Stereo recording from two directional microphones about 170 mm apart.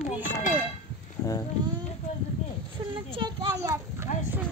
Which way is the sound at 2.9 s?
30° right (ahead or behind).